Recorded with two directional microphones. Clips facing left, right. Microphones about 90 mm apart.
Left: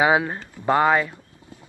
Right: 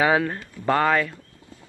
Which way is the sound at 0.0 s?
20° left (ahead or behind).